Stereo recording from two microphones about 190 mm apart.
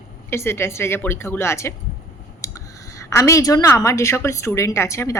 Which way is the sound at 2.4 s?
15° left (ahead or behind).